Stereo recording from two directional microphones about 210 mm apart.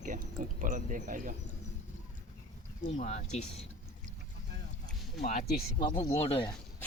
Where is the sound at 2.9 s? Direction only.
35° left (ahead or behind).